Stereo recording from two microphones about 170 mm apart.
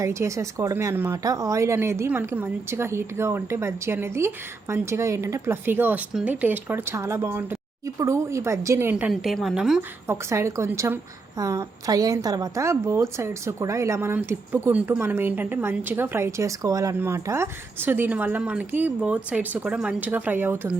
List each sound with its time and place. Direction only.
0.0 s a woman's voice: 15° right (ahead or behind)
10.1 s a woman's voice: 15° right (ahead or behind)